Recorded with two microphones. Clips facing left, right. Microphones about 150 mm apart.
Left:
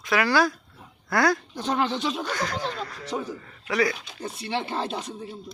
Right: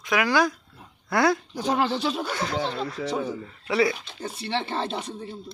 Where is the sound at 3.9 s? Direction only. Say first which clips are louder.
Right 1 dB; centre (ahead or behind).